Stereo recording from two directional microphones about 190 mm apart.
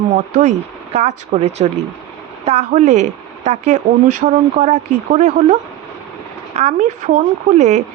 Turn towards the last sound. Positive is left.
turn(degrees=-35)  # may be behind; listen again after turning